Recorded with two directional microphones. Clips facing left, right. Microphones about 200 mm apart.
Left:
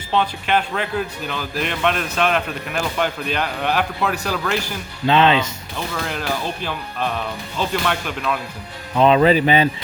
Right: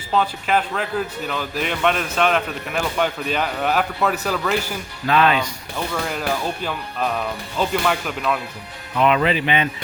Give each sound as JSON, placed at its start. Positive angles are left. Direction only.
{"t": 0.1, "sound": "a man's voice", "side_deg": 0}
{"t": 5.0, "sound": "speech", "side_deg": 25}
{"t": 5.9, "sound": "a man's voice", "side_deg": 0}
{"t": 7.7, "sound": "a man's voice", "side_deg": 0}
{"t": 9.0, "sound": "speech", "side_deg": 30}